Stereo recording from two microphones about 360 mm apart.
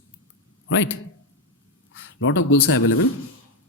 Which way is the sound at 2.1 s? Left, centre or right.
Left.